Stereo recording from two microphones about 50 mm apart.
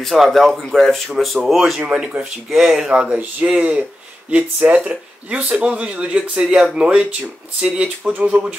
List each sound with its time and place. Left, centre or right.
0.0 s speech: centre
2.0 s speech: centre